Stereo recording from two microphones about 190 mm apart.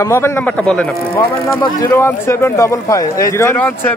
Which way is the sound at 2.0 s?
15° left (ahead or behind).